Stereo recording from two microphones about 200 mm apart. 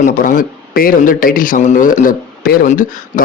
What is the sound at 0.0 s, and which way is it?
Speech, 40° left (ahead or behind).